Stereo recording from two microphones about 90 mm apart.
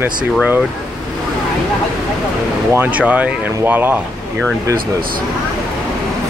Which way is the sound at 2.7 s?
20° right (ahead or behind).